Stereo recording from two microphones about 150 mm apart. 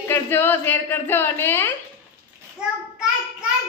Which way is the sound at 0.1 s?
15° left (ahead or behind).